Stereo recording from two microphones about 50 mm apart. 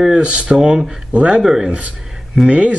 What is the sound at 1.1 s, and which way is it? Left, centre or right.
Speech, right.